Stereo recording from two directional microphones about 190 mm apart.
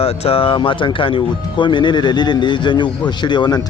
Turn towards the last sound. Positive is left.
turn(degrees=25)  # may be behind; listen again after turning